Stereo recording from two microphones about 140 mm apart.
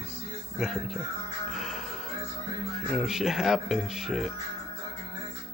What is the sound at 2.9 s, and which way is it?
Speech, 5° right (ahead or behind).